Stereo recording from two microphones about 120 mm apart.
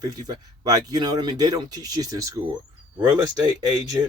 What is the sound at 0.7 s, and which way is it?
Speech, 35° right (ahead or behind).